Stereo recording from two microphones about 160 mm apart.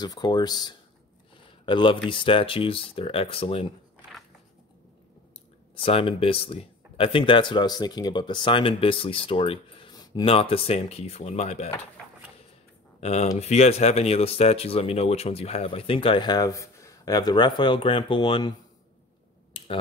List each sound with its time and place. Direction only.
0.0 s speech: 25° left (ahead or behind)
5.8 s speech: 35° left (ahead or behind)
10.3 s speech: 35° left (ahead or behind)
13.0 s speech: 40° left (ahead or behind)